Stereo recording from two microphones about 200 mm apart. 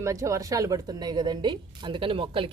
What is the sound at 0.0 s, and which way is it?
Speech, 15° right (ahead or behind).